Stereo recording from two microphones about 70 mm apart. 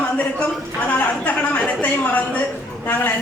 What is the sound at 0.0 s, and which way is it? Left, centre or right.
A woman's voice, centre.